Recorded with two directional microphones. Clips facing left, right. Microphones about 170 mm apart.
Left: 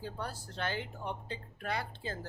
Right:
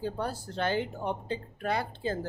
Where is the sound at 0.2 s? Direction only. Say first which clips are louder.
Right 7 dB; 30° right (ahead or behind).